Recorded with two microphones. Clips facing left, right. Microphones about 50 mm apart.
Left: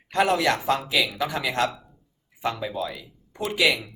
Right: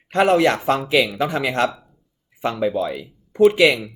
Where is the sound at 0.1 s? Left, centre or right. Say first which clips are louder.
Right 6 dB; right.